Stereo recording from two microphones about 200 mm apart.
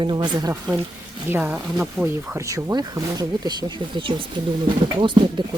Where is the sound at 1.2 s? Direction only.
10° right (ahead or behind).